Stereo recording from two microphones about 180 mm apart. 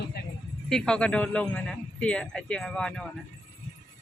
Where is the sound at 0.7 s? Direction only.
5° left (ahead or behind).